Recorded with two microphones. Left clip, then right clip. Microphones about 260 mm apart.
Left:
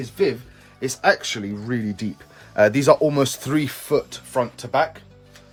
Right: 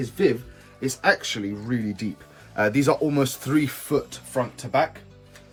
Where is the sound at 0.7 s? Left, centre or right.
Left.